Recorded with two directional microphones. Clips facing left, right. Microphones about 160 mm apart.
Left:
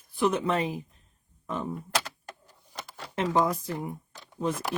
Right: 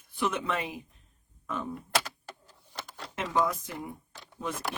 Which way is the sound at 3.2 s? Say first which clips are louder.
Left 3 dB; 35° left (ahead or behind).